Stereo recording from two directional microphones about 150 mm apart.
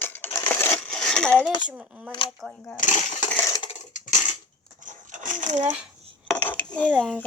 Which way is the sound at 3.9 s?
55° left (ahead or behind).